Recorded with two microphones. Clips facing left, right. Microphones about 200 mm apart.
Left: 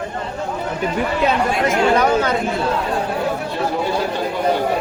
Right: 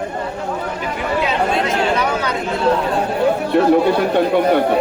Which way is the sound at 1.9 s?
45° left (ahead or behind).